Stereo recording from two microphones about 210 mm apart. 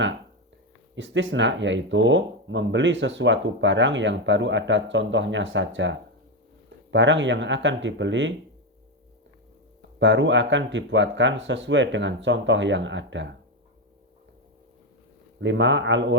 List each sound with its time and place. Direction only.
0.9 s speech: 60° right (ahead or behind)
10.0 s speech: 60° right (ahead or behind)
15.4 s speech: 60° right (ahead or behind)